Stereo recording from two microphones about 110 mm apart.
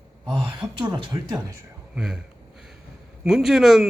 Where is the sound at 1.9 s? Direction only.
5° right (ahead or behind).